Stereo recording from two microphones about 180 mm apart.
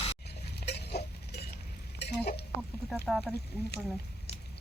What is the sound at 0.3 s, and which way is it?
Goat, 65° left (ahead or behind).